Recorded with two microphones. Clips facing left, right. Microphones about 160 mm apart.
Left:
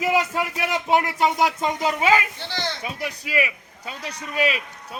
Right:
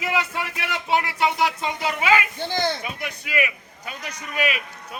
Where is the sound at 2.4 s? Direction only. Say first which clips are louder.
Right 5 dB; 45° right (ahead or behind).